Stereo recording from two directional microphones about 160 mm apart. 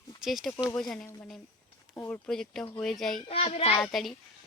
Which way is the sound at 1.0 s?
15° left (ahead or behind).